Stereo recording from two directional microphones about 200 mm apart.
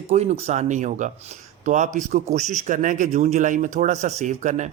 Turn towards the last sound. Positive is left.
turn(degrees=-35)  # may be behind; listen again after turning